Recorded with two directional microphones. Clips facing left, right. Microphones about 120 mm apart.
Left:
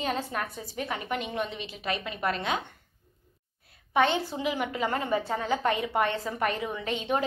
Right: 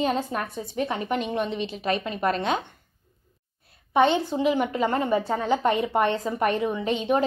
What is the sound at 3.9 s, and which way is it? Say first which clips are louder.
A woman's voice: right 5 dB; 25° right (ahead or behind).